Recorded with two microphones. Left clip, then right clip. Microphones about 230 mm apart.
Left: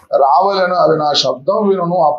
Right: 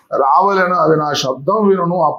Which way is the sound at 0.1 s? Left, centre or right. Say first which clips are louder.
Left 1 dB; right.